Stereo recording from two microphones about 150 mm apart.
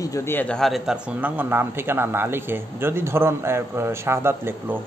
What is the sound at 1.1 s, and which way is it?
Speech, 10° right (ahead or behind).